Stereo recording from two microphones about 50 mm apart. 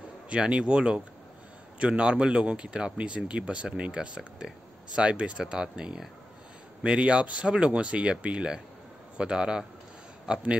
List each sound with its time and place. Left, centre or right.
0.3 s speech: right